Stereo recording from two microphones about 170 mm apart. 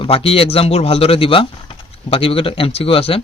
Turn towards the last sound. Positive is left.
turn(degrees=35)  # may be behind; listen again after turning